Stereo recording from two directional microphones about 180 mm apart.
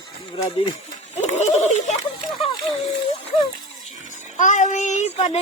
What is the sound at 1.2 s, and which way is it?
Speech, 40° left (ahead or behind).